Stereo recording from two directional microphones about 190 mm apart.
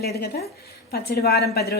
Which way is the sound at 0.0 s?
55° left (ahead or behind).